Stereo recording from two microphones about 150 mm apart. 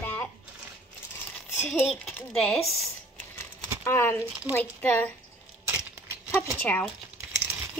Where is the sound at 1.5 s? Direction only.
15° left (ahead or behind).